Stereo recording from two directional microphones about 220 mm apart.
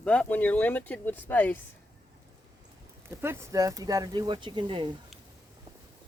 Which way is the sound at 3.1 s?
10° right (ahead or behind).